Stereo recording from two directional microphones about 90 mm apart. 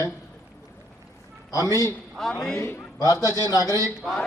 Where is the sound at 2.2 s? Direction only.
5° left (ahead or behind).